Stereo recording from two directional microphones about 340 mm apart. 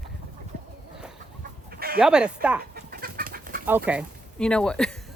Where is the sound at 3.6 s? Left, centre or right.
Centre.